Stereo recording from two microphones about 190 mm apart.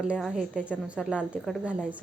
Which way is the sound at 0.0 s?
5° right (ahead or behind).